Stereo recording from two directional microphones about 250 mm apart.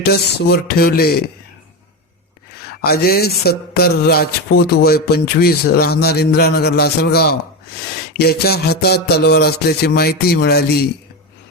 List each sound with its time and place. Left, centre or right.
0.0 s music: left
2.8 s music: left